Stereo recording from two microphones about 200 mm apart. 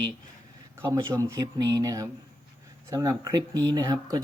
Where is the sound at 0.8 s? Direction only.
15° right (ahead or behind).